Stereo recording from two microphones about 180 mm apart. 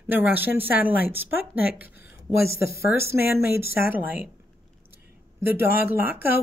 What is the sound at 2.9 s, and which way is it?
Speech, 15° right (ahead or behind).